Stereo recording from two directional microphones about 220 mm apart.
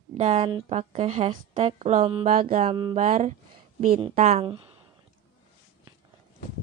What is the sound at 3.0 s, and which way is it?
Speech, 35° right (ahead or behind).